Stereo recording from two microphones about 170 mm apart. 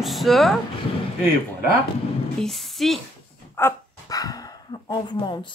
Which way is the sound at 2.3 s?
Centre (ahead or behind).